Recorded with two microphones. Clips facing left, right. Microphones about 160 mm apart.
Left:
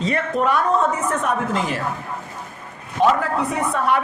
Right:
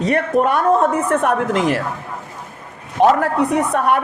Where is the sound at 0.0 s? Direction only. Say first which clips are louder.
Right 5 dB; 60° right (ahead or behind).